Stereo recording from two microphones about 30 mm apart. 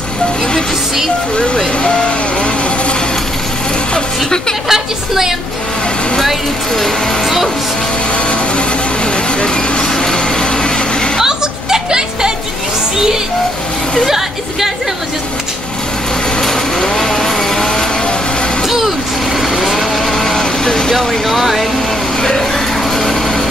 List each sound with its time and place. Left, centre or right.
1.3 s speech: left
1.8 s vehicle: left
4.6 s speech: centre
6.7 s speech: centre
8.1 s vehicle: left
9.8 s vehicle: left
11.2 s music: right
14.0 s speech: centre
16.3 s vehicle: centre
18.7 s vehicle: centre
20.1 s vehicle: centre
21.3 s speech: centre
22.2 s a sound: left
22.8 s light engine: centre